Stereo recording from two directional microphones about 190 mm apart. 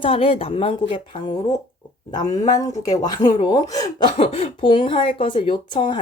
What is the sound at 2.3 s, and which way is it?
Speech, 20° left (ahead or behind).